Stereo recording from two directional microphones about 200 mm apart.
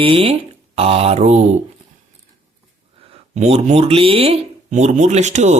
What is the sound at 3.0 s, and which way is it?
Speech, 30° right (ahead or behind).